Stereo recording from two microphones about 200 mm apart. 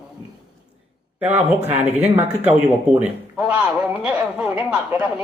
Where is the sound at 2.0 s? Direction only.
30° right (ahead or behind).